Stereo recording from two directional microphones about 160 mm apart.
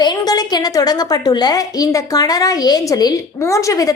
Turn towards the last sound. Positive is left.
turn(degrees=20)  # may be behind; listen again after turning